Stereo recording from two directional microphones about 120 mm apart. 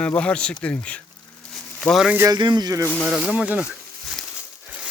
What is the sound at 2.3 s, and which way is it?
Speech, 35° right (ahead or behind).